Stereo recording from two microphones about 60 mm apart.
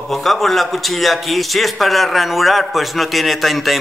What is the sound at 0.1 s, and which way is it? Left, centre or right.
A man's voice, centre.